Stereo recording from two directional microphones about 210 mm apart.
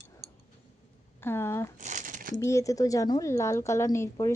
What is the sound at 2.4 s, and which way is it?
Speech, 15° left (ahead or behind).